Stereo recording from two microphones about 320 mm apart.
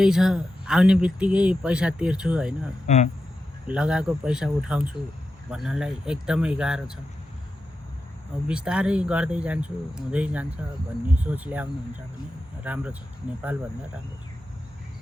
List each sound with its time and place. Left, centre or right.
0.0 s speech: centre
2.8 s speech: left
3.7 s speech: centre
8.4 s speech: centre